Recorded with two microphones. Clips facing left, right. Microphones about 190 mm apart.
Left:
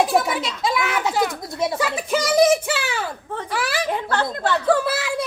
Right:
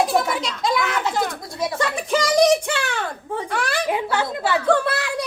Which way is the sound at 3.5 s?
5° left (ahead or behind).